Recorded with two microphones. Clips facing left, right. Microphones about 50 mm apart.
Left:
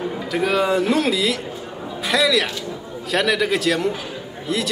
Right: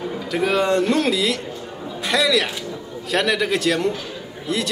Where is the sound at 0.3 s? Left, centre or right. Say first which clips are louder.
Even; centre.